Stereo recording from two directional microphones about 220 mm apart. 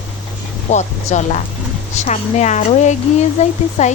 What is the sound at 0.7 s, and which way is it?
Speech, 30° left (ahead or behind).